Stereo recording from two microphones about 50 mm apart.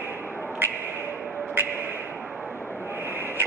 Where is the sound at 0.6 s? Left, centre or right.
Right.